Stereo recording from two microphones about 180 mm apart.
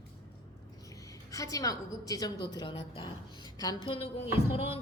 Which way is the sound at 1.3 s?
20° left (ahead or behind).